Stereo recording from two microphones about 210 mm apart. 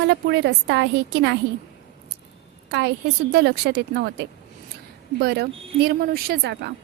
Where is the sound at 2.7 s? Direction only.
55° right (ahead or behind).